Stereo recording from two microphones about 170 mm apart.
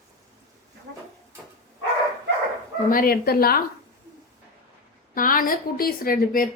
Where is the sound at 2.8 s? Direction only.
60° left (ahead or behind).